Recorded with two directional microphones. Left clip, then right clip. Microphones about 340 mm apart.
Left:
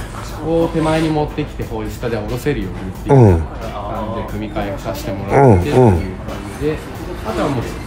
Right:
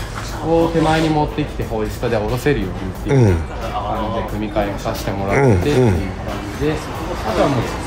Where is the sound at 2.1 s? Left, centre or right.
Centre.